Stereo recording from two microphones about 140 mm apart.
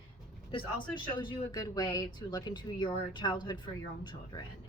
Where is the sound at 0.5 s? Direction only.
35° left (ahead or behind).